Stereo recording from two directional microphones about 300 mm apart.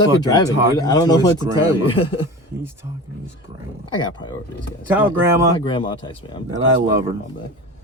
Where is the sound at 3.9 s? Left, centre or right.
Centre.